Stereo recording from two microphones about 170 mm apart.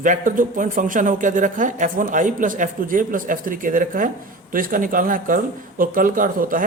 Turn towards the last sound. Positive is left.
turn(degrees=-55)  # may be behind; listen again after turning